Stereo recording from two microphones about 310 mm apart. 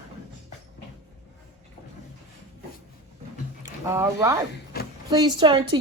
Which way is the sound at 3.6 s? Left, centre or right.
Centre.